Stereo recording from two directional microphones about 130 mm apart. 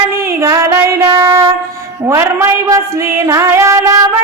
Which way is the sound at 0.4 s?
25° right (ahead or behind).